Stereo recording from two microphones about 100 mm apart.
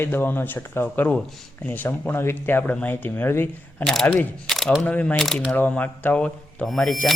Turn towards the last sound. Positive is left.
turn(degrees=10)  # may be behind; listen again after turning